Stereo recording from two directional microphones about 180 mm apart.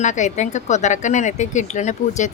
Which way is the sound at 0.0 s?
40° left (ahead or behind).